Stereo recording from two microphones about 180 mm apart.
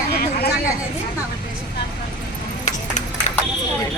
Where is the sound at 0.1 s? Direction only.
60° left (ahead or behind).